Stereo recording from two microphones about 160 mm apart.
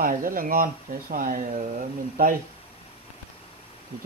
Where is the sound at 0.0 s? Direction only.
60° right (ahead or behind).